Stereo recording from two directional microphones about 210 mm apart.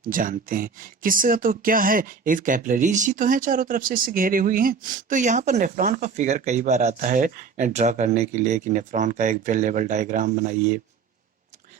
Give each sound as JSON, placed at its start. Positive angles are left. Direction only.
{"t": 0.1, "sound": "speech", "side_deg": -40}